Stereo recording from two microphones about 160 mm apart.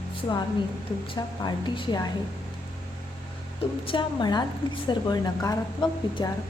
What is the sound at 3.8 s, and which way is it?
A woman's voice, 30° left (ahead or behind).